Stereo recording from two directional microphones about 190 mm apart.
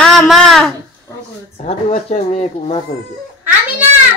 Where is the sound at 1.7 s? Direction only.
35° left (ahead or behind).